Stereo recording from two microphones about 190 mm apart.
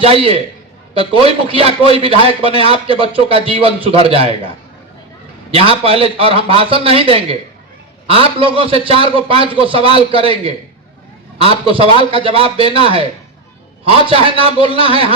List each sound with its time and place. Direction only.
0.0 s a man's voice: 30° right (ahead or behind)